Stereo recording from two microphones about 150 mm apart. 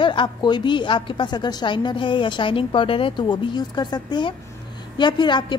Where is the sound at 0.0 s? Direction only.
35° left (ahead or behind).